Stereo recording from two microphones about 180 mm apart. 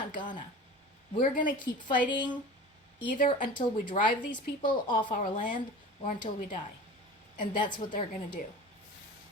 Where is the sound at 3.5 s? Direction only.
25° left (ahead or behind).